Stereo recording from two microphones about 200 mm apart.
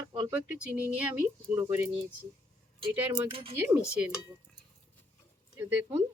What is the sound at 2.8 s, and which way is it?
Speech, 25° right (ahead or behind).